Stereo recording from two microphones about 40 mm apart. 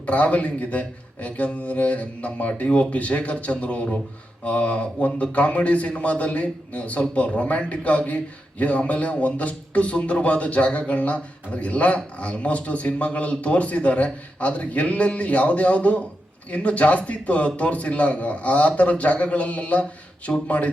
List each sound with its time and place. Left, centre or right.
0.0 s a man's voice: left